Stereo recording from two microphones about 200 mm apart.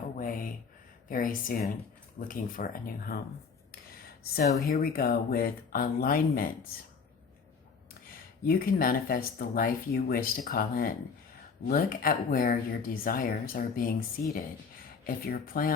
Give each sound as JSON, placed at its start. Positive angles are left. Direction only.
{"t": 0.2, "sound": "a sound", "side_deg": 45}
{"t": 1.0, "sound": "speech", "side_deg": 45}
{"t": 3.7, "sound": "a sound", "side_deg": 50}
{"t": 4.6, "sound": "speech", "side_deg": 45}
{"t": 8.0, "sound": "speech", "side_deg": 45}
{"t": 15.0, "sound": "speech", "side_deg": 45}